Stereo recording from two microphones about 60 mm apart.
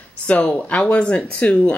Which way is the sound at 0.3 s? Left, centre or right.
Centre.